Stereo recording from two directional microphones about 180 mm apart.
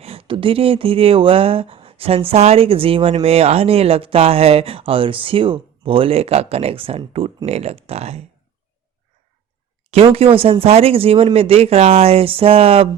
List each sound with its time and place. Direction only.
0.0 s speech: 30° right (ahead or behind)
9.9 s speech: 30° right (ahead or behind)